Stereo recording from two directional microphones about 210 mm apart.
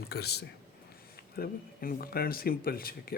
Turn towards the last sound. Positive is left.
turn(degrees=45)  # may be behind; listen again after turning